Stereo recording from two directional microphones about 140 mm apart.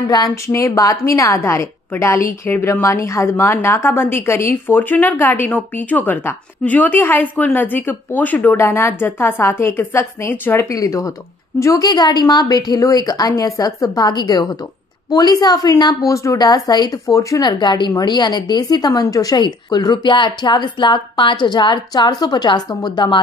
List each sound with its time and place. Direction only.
0.0 s a woman's voice: 25° left (ahead or behind)